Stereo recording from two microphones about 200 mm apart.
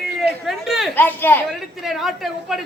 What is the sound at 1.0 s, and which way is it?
Speech, 10° left (ahead or behind).